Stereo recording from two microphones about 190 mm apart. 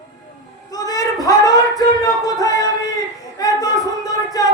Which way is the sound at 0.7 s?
20° left (ahead or behind).